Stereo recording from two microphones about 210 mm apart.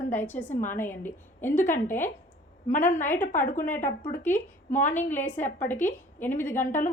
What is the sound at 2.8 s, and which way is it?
Speech, 35° left (ahead or behind).